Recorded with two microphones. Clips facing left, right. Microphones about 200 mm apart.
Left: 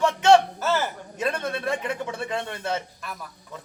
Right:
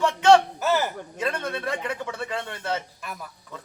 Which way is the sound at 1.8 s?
15° left (ahead or behind).